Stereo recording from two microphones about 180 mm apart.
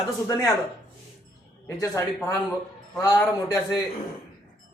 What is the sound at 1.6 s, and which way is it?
Speech, 15° left (ahead or behind).